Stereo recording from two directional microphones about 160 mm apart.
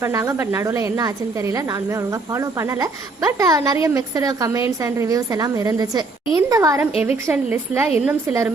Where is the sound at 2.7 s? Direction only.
20° right (ahead or behind).